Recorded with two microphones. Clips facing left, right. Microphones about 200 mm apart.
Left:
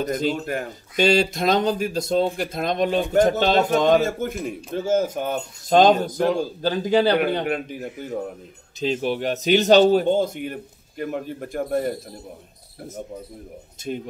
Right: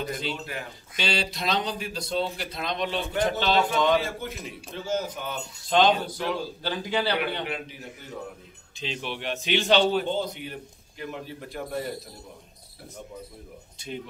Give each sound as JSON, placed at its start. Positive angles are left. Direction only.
{"t": 0.0, "sound": "speech", "side_deg": 45}